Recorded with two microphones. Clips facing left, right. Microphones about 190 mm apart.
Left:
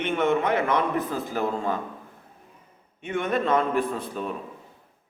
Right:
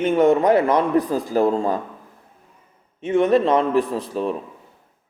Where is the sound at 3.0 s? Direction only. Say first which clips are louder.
Right 8 dB; 30° right (ahead or behind).